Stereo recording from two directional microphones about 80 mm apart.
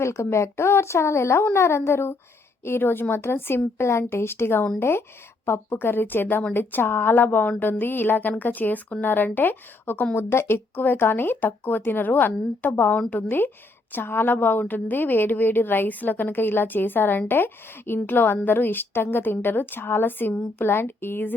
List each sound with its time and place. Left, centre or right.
0.0 s a woman's voice: left